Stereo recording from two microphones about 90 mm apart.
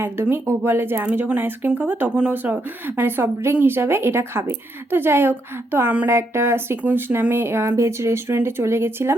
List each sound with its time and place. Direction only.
0.0 s speech: 25° right (ahead or behind)